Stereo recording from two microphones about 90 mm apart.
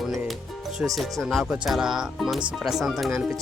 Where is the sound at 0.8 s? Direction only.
15° right (ahead or behind).